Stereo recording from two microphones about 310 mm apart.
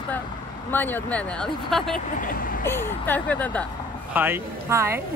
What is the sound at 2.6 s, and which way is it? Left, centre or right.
Speech, centre.